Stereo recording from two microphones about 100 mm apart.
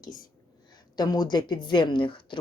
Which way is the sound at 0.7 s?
40° left (ahead or behind).